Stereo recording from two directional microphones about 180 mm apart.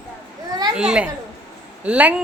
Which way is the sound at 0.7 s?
5° right (ahead or behind).